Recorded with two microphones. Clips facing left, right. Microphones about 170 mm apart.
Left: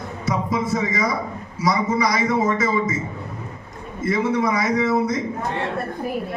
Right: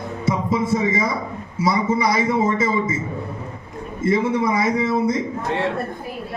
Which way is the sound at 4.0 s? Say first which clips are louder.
Right 1 dB; 25° right (ahead or behind).